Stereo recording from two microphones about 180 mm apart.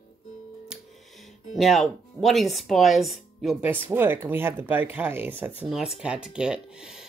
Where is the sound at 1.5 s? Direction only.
Centre (ahead or behind).